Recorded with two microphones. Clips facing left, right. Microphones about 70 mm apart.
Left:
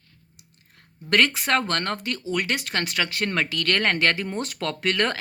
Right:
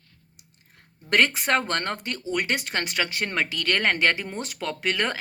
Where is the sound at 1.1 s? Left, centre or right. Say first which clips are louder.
Left 1 dB; right.